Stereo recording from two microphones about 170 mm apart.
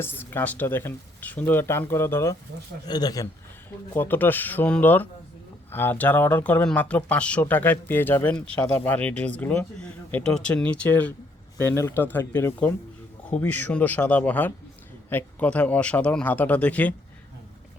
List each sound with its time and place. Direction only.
0.0 s speech: 15° left (ahead or behind)
3.9 s speech: 10° left (ahead or behind)